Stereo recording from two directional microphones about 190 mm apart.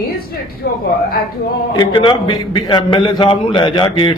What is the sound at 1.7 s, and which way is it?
A man's voice, 25° left (ahead or behind).